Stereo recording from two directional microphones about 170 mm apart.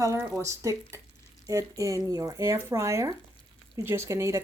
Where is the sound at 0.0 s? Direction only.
20° right (ahead or behind).